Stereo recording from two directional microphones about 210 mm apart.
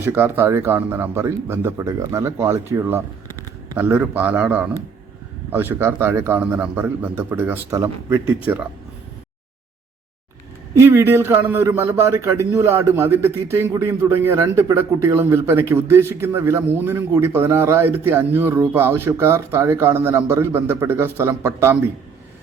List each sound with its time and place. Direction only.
0.0 s a man's voice: 10° right (ahead or behind)
10.8 s a man's voice: 10° right (ahead or behind)